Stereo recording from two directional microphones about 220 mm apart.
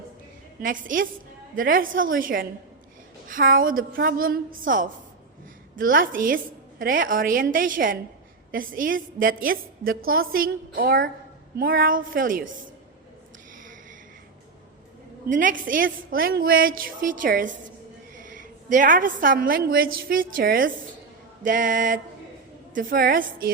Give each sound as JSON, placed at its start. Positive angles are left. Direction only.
{"t": 0.6, "sound": "a woman's voice", "side_deg": -40}
{"t": 15.3, "sound": "a woman's voice", "side_deg": -40}